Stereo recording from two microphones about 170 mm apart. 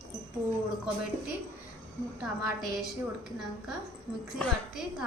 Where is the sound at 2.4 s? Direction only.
5° right (ahead or behind).